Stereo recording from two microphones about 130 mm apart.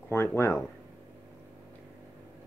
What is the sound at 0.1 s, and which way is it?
Speech, 20° left (ahead or behind).